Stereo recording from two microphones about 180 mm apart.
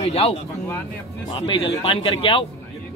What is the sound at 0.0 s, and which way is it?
Speech, 35° left (ahead or behind).